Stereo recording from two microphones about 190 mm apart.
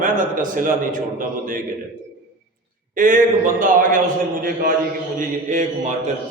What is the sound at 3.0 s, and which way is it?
A man's voice, 45° right (ahead or behind).